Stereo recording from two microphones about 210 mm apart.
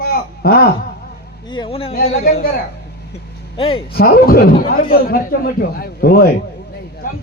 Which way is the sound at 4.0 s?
45° left (ahead or behind).